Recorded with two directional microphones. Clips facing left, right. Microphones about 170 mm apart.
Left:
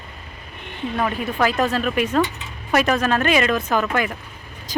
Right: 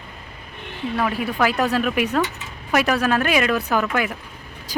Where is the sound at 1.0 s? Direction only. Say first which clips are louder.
Even; 10° right (ahead or behind).